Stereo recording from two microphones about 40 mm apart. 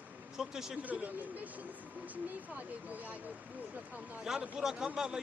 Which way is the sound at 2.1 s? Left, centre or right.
Right.